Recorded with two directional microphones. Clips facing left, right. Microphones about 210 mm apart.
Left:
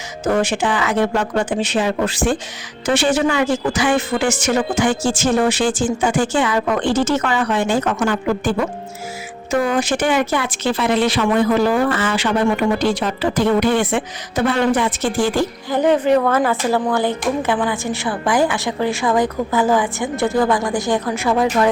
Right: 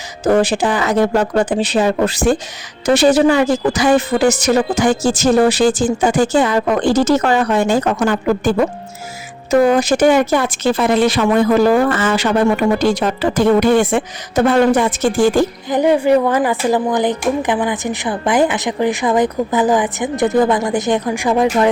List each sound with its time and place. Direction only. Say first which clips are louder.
0.3 s speech: right 4 dB; 35° right (ahead or behind)
15.7 s speech: right 2 dB; 10° right (ahead or behind)